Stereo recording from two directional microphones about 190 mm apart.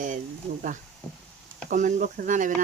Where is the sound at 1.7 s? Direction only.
40° right (ahead or behind).